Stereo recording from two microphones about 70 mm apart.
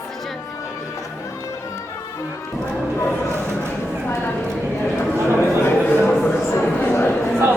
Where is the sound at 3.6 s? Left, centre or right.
Left.